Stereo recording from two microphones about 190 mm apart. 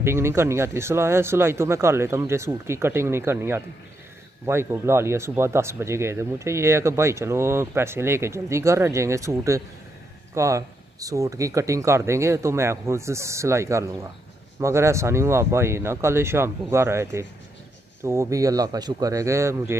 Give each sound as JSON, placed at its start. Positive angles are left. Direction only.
{"t": 0.0, "sound": "speech", "side_deg": -15}